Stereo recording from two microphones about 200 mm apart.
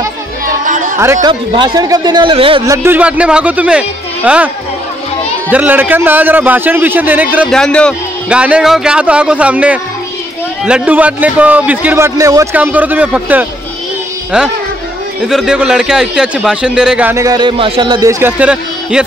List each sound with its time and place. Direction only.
0.7 s chatter: 40° right (ahead or behind)
0.9 s a man's voice: 15° right (ahead or behind)
2.6 s a man's voice: 15° right (ahead or behind)
5.5 s a man's voice: 10° right (ahead or behind)
7.5 s a man's voice: 5° left (ahead or behind)
15.2 s a man's voice: 5° right (ahead or behind); by 18.1 s 20° right (ahead or behind)
18.2 s a man's voice: 5° right (ahead or behind)